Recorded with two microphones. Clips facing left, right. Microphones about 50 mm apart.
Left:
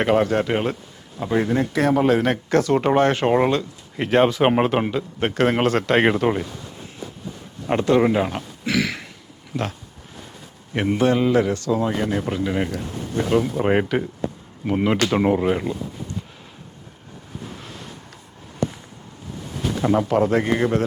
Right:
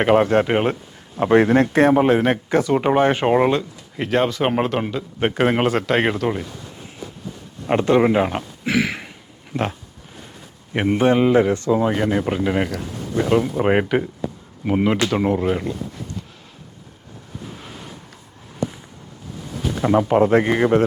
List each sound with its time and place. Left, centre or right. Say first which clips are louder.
0.0 s speech: right 3 dB; centre
1.2 s speech: right 6 dB; right
1.6 s speech: right 4 dB; right; by 3.7 s centre
3.9 s speech: left 2 dB; centre
5.2 s a man's voice: right 1 dB; centre
7.7 s speech: right 2 dB; centre
10.8 s a man's voice: right 2 dB; right
15.0 s a man's voice: left 1 dB; centre
17.5 s waves: even; centre
19.8 s speech: right 2 dB; centre
20.1 s a man's voice: right 3 dB; right